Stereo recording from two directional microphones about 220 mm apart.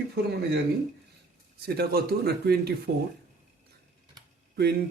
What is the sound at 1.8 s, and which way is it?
Speech, 45° right (ahead or behind).